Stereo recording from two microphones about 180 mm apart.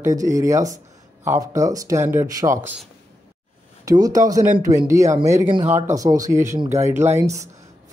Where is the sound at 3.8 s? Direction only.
20° right (ahead or behind).